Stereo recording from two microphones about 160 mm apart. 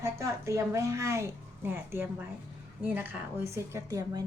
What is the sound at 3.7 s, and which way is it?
Speech, 20° right (ahead or behind).